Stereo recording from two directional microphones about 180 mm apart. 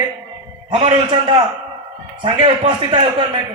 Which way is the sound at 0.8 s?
30° right (ahead or behind).